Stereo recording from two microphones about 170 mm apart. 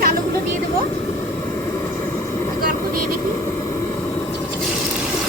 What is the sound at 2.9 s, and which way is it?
Vehicle, 55° right (ahead or behind).